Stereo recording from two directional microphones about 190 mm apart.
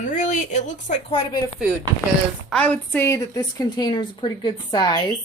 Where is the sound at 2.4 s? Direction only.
5° left (ahead or behind); by 5.1 s 25° left (ahead or behind).